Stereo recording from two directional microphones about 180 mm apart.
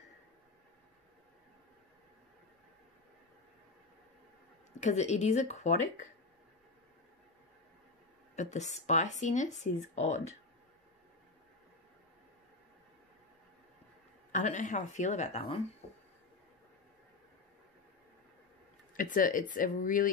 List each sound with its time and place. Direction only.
4.7 s speech: 40° left (ahead or behind)
8.4 s speech: 40° left (ahead or behind)
14.3 s speech: 40° left (ahead or behind)
18.9 s speech: 50° left (ahead or behind)